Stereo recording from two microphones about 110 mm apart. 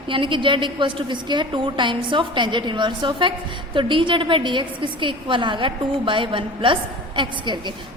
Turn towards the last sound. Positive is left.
turn(degrees=-45)  # may be behind; listen again after turning